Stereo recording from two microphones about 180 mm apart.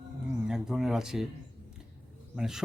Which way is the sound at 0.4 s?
5° right (ahead or behind).